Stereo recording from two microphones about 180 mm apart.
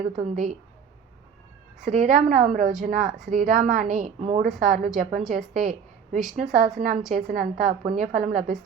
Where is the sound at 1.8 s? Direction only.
45° right (ahead or behind).